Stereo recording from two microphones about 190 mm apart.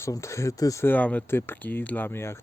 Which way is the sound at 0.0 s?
15° left (ahead or behind).